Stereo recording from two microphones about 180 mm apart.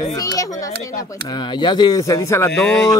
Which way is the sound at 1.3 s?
25° left (ahead or behind).